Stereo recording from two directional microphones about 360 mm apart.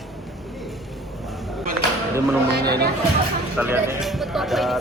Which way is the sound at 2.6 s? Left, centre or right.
Right.